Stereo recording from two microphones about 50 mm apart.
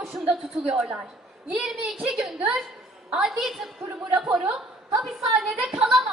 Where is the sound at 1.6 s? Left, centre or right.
Centre.